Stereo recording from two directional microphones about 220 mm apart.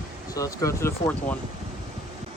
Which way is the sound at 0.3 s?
15° left (ahead or behind).